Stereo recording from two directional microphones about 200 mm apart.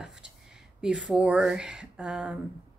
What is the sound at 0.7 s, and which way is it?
Speech, 5° right (ahead or behind).